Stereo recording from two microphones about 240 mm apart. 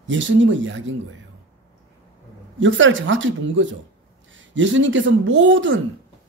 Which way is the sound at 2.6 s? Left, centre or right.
Right.